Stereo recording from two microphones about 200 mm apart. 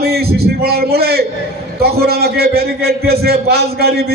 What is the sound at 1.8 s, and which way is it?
A man's voice, 50° right (ahead or behind).